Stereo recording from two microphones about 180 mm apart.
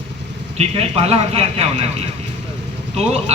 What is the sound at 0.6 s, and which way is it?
A man's voice, 35° right (ahead or behind).